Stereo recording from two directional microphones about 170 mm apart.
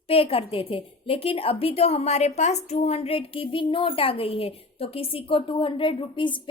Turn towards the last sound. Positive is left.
turn(degrees=30)  # may be behind; listen again after turning